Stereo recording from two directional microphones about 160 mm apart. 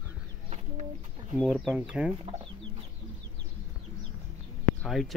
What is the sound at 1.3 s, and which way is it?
Speech, 5° right (ahead or behind).